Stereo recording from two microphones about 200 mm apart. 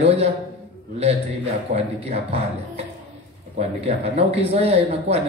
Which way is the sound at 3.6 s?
30° right (ahead or behind).